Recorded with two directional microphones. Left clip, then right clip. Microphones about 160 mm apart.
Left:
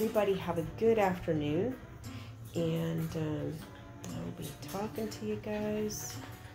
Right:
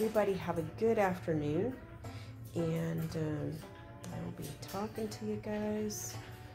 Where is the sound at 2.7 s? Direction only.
15° right (ahead or behind).